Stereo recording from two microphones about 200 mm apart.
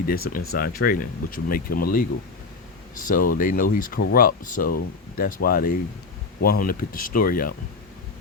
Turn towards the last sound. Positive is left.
turn(degrees=45)  # may be behind; listen again after turning